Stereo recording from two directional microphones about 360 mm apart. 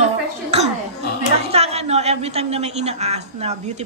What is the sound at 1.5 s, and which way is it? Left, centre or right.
A woman's voice, centre.